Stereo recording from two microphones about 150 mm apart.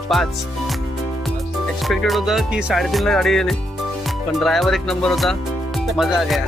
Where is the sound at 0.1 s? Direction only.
Centre (ahead or behind).